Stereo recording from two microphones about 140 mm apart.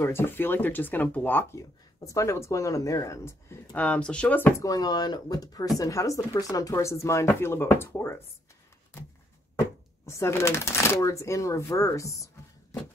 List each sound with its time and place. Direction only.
0.0 s speech: 15° left (ahead or behind)
4.6 s speech: 30° left (ahead or behind)
9.6 s speech: 20° left (ahead or behind)